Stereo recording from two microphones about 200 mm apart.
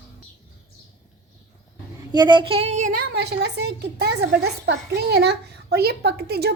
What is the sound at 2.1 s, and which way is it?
Speech, 20° right (ahead or behind).